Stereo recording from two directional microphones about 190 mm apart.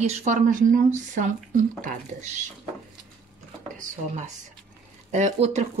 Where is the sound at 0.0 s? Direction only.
35° right (ahead or behind).